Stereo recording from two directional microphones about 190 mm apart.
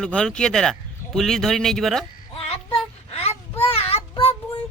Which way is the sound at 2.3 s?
30° left (ahead or behind).